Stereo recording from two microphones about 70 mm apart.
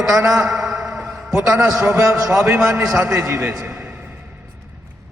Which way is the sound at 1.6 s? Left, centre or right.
Centre.